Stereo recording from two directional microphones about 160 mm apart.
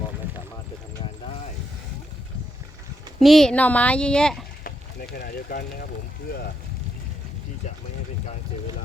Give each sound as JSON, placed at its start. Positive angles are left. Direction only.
{"t": 3.2, "sound": "speech", "side_deg": 0}
{"t": 4.6, "sound": "speech", "side_deg": 70}